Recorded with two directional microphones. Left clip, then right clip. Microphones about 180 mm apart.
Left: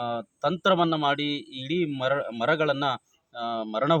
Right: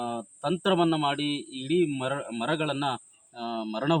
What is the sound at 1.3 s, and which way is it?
Speech, 50° left (ahead or behind).